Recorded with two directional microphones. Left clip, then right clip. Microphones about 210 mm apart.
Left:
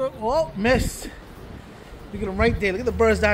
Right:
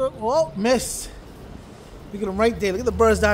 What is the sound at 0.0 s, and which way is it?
Speech, 10° right (ahead or behind).